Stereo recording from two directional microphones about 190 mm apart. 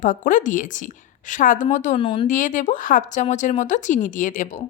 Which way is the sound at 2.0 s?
25° left (ahead or behind).